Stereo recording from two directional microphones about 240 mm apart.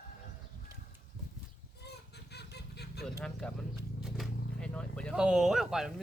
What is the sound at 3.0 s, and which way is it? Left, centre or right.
Speech, centre.